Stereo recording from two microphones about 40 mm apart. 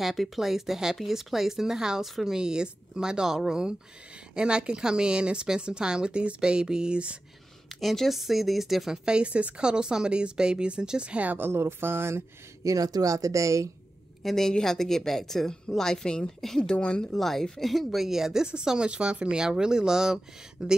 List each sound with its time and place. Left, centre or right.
0.0 s speech: centre; by 7.2 s right
7.8 s speech: centre
8.1 s speech: centre
8.9 s speech: right
11.3 s speech: right
14.2 s a woman's voice: centre
16.7 s speech: left
17.1 s speech: centre
18.8 s speech: right